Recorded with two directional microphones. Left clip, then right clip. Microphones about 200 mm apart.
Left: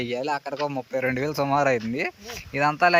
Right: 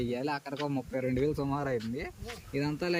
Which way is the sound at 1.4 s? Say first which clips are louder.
Left 11 dB; 40° left (ahead or behind).